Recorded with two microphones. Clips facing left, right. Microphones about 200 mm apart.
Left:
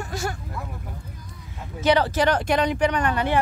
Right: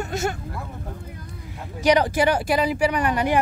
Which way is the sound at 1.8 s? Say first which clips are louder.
Right 1 dB; 15° right (ahead or behind).